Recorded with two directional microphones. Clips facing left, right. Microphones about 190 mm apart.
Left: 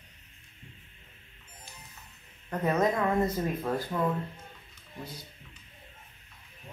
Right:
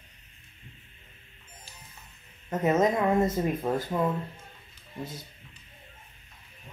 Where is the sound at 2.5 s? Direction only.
20° right (ahead or behind).